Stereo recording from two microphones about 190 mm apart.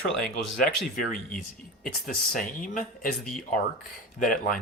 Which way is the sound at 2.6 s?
45° left (ahead or behind).